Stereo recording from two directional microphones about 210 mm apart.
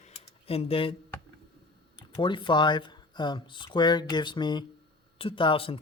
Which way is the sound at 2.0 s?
25° left (ahead or behind).